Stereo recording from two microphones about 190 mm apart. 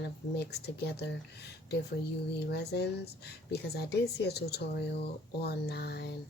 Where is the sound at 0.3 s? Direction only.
60° left (ahead or behind).